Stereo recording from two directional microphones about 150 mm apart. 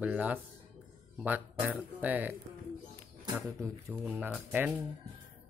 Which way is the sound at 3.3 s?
15° right (ahead or behind).